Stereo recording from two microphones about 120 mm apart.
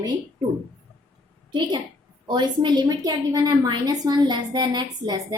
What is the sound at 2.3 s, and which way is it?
A woman's voice, 35° right (ahead or behind).